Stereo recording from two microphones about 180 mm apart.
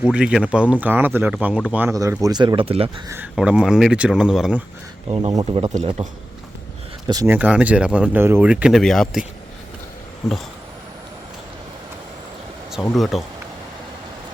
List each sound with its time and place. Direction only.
0.0 s speech: 5° right (ahead or behind); by 3.0 s 30° right (ahead or behind)
3.3 s speech: 5° right (ahead or behind)
5.3 s speech: 25° right (ahead or behind)
7.1 s speech: 20° right (ahead or behind)
7.3 s speech: 10° right (ahead or behind)
10.2 s speech: centre (ahead or behind)
12.7 s speech: centre (ahead or behind)